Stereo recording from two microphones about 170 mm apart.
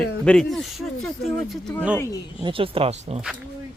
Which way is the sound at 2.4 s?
30° right (ahead or behind).